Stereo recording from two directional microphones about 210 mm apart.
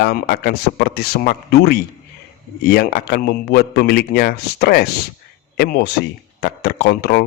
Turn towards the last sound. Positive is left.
turn(degrees=50)  # may be behind; listen again after turning